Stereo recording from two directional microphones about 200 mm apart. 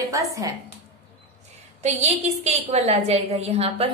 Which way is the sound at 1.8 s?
35° right (ahead or behind).